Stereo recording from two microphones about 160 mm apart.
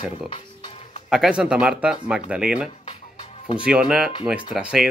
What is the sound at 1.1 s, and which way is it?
Speech, 5° right (ahead or behind).